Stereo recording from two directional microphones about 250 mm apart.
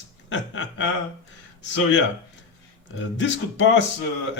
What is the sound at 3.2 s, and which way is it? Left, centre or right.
Speech, left.